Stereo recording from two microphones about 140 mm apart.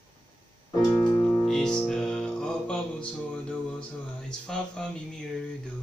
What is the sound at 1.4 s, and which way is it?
Music, 5° left (ahead or behind).